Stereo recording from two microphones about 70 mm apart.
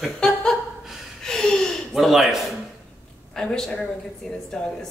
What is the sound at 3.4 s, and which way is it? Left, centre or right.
A woman's voice, centre.